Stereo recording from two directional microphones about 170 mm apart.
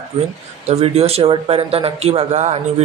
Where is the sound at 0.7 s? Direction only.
35° right (ahead or behind).